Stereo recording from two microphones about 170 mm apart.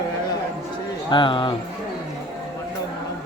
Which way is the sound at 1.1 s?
30° left (ahead or behind).